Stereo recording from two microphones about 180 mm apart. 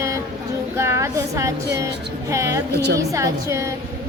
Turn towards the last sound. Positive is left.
turn(degrees=-15)  # may be behind; listen again after turning